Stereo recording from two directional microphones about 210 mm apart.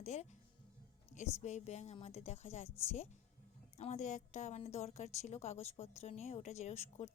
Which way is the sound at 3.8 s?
35° left (ahead or behind).